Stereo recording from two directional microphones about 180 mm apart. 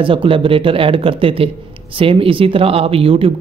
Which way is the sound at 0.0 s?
30° right (ahead or behind).